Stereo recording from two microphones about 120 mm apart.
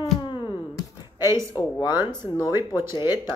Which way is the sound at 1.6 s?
35° left (ahead or behind).